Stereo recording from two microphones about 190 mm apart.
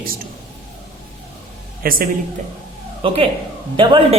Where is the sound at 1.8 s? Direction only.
50° right (ahead or behind).